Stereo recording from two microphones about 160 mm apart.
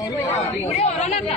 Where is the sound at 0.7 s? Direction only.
45° left (ahead or behind).